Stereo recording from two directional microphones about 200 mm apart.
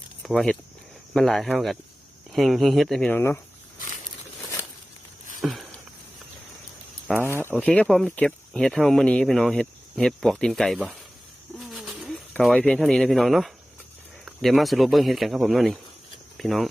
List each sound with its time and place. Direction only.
0.2 s speech: centre (ahead or behind)
5.4 s a sound: centre (ahead or behind)
7.2 s speech: 10° right (ahead or behind)
7.4 s speech: 5° left (ahead or behind)
11.5 s bird: centre (ahead or behind)
14.3 s speech: centre (ahead or behind)